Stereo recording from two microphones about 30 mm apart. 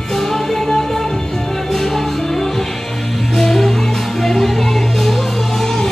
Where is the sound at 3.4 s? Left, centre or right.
Centre.